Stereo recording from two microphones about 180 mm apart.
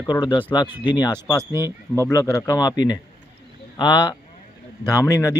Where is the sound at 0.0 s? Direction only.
20° left (ahead or behind).